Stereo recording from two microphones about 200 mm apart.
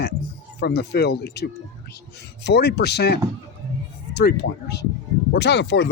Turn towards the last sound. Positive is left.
turn(degrees=60)  # may be behind; listen again after turning